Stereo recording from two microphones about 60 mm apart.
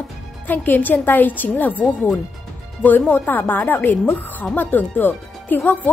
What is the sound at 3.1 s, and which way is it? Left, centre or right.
A woman's voice, left.